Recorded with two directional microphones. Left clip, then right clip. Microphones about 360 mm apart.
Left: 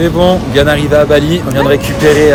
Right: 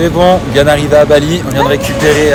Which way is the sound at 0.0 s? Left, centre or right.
Centre.